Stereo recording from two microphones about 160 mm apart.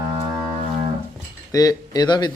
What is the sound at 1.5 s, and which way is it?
Speech, 20° left (ahead or behind).